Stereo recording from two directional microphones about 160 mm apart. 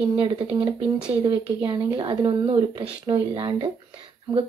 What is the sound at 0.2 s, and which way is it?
A woman's voice, 35° right (ahead or behind).